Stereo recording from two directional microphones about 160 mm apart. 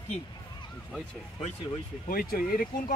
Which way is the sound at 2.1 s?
65° left (ahead or behind).